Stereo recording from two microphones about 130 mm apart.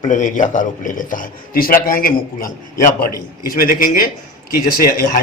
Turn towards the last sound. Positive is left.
turn(degrees=90)